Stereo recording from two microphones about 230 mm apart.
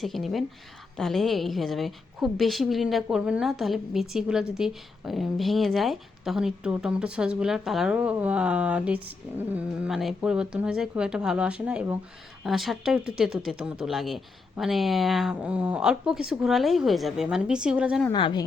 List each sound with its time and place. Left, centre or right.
0.0 s a woman's voice: centre
18.1 s speech: centre